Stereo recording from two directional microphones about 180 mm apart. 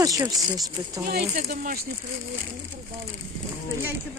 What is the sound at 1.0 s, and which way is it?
Speech, 60° right (ahead or behind).